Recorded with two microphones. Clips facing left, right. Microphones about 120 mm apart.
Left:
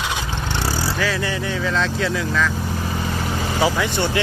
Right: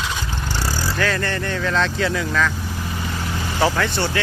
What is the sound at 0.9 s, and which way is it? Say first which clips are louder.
Speech: even; 5° left (ahead or behind).